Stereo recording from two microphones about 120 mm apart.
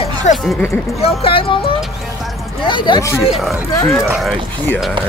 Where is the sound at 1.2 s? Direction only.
50° left (ahead or behind).